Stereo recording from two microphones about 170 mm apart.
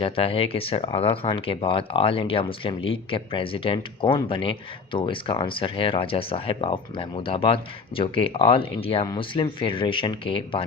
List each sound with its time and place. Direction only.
0.0 s speech: 35° left (ahead or behind)